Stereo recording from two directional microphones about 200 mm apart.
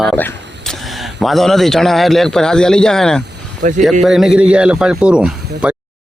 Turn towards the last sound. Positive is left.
turn(degrees=-5)  # may be behind; listen again after turning